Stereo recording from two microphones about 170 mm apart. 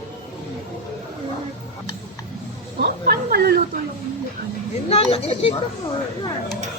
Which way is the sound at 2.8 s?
65° right (ahead or behind).